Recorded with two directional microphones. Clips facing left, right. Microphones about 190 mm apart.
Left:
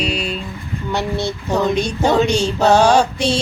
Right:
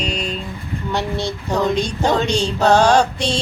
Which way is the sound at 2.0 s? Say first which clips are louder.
Left 4 dB; 10° left (ahead or behind).